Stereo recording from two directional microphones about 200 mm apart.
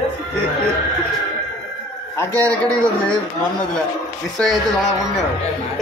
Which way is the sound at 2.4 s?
5° left (ahead or behind).